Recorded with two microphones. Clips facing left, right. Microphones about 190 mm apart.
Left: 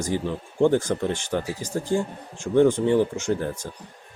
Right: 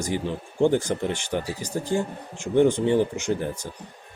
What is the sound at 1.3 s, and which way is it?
Speech, 15° right (ahead or behind).